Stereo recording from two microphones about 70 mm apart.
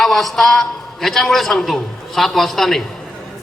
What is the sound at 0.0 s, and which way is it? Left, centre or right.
A man's voice, centre.